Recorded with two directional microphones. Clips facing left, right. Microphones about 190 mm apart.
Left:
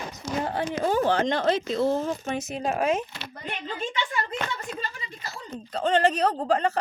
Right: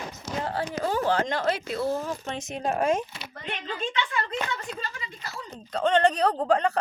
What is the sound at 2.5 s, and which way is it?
Speech, 5° left (ahead or behind).